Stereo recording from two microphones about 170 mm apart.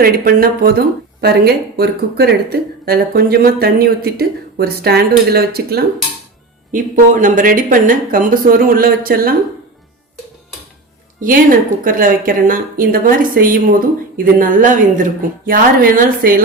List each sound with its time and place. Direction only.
0.0 s speech: 60° right (ahead or behind)
6.7 s speech: 50° right (ahead or behind)
11.2 s a woman's voice: 55° right (ahead or behind)